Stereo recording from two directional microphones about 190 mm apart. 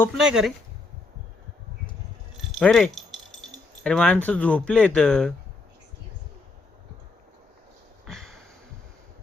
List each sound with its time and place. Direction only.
0.2 s speech: 5° right (ahead or behind)
2.6 s speech: 5° left (ahead or behind)
8.0 s sniff: centre (ahead or behind)